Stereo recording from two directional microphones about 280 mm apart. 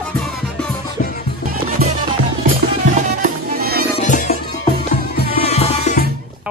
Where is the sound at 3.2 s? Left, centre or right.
Right.